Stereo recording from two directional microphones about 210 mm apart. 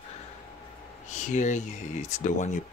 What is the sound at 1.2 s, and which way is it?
Speech, 35° left (ahead or behind).